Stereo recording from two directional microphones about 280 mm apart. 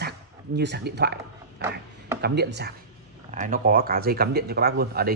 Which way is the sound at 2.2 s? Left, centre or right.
Right.